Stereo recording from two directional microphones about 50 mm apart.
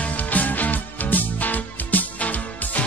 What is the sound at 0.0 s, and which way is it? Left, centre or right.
Music, left.